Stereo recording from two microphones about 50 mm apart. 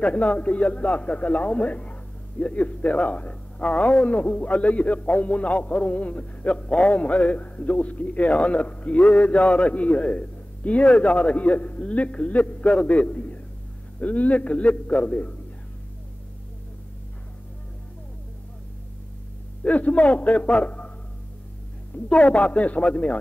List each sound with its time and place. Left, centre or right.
0.0 s a man's voice: left
19.6 s a man's voice: left
21.9 s a man's voice: left